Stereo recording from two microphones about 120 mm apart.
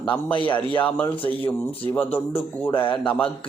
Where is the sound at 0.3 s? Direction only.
45° left (ahead or behind).